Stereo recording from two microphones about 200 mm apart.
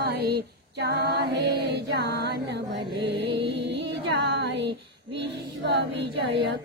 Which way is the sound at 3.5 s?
60° right (ahead or behind).